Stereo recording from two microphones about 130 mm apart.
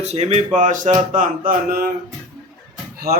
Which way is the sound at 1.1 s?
90° right.